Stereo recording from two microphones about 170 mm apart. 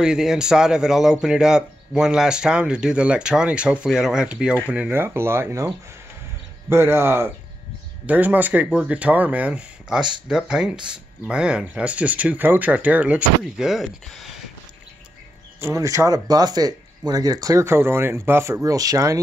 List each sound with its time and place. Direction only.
0.0 s speech: 5° right (ahead or behind)
6.7 s speech: 15° right (ahead or behind)
15.6 s speech: 20° right (ahead or behind)